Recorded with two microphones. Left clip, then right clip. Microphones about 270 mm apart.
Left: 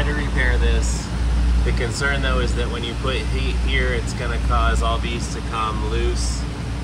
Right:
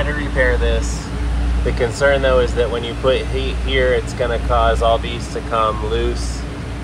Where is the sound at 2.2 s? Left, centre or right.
Centre.